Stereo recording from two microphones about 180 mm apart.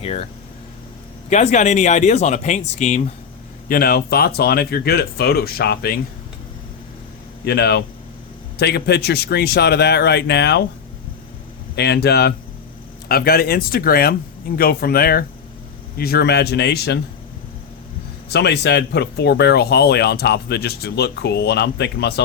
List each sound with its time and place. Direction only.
0.0 s speech: 35° left (ahead or behind)
1.3 s speech: 40° left (ahead or behind)
3.7 s speech: 55° left (ahead or behind)
7.4 s speech: 65° left (ahead or behind)
11.8 s speech: 65° left (ahead or behind)
18.3 s speech: 65° left (ahead or behind)